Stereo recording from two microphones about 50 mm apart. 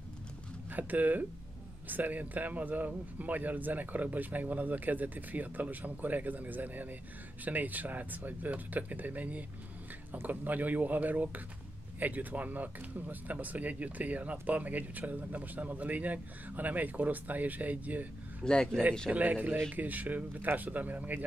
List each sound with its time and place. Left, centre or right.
0.7 s speech: right
18.4 s speech: centre
19.1 s speech: right